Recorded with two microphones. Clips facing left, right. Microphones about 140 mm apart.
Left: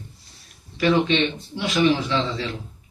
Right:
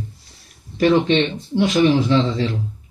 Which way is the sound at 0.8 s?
45° right (ahead or behind).